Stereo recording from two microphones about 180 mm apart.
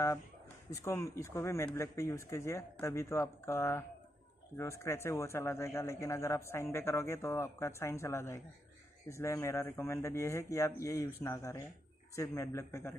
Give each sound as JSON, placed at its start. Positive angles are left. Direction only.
{"t": 0.7, "sound": "a man's voice", "side_deg": 15}